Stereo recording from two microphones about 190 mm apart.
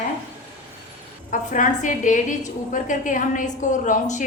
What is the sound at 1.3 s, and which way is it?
A woman's voice, 40° left (ahead or behind).